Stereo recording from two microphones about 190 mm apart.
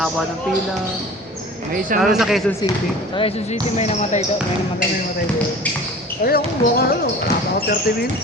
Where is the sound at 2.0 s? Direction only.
Centre (ahead or behind).